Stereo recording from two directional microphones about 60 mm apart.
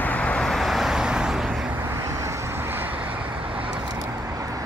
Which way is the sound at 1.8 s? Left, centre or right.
Right.